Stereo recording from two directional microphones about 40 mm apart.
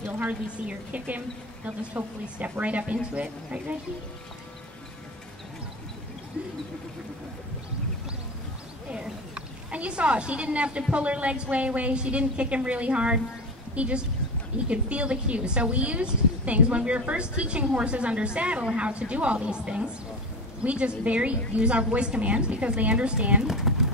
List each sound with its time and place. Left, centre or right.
0.2 s a woman's voice: right
3.2 s a woman's voice: right
8.9 s a woman's voice: right
23.4 s speech: centre